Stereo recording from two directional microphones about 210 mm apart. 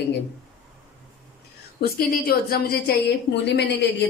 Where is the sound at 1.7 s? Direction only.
45° left (ahead or behind).